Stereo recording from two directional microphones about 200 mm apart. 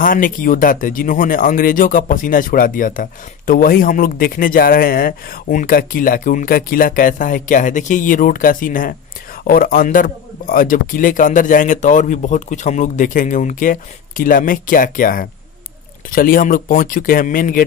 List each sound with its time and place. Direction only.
0.0 s a man's voice: 45° left (ahead or behind)